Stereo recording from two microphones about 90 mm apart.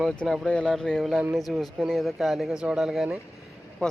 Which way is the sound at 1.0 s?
Centre (ahead or behind).